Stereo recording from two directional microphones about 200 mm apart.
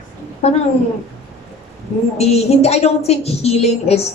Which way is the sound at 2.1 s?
30° left (ahead or behind).